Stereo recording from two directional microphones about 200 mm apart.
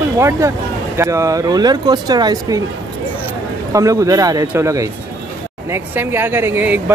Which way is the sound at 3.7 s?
15° right (ahead or behind).